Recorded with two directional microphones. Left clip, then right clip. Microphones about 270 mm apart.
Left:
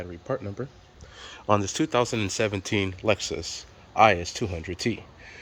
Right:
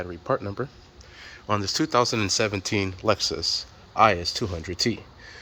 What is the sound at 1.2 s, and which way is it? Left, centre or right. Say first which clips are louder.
Speech: left 3 dB; left.